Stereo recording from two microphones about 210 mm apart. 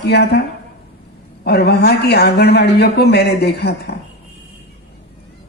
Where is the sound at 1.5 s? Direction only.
50° left (ahead or behind).